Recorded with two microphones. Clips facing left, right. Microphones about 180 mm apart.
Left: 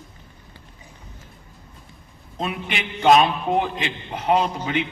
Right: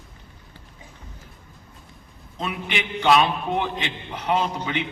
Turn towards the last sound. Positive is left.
turn(degrees=45)  # may be behind; listen again after turning